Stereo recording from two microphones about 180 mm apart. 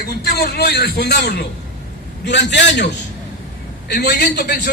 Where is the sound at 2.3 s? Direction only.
75° left (ahead or behind).